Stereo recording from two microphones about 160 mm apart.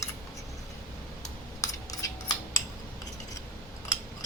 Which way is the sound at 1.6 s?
20° left (ahead or behind).